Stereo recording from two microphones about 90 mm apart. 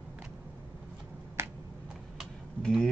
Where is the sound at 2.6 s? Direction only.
10° left (ahead or behind).